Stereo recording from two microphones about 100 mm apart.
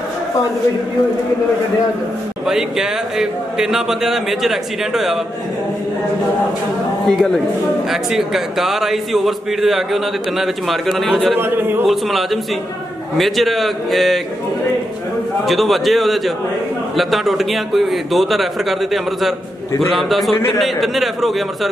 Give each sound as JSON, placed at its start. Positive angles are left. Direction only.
{"t": 2.4, "sound": "a man's voice", "side_deg": -5}
{"t": 7.1, "sound": "a man's voice", "side_deg": 5}
{"t": 11.3, "sound": "speech", "side_deg": -20}
{"t": 11.8, "sound": "a man's voice", "side_deg": 0}
{"t": 15.4, "sound": "a man's voice", "side_deg": 0}